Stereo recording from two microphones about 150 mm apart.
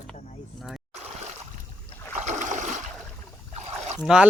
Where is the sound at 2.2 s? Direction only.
60° right (ahead or behind).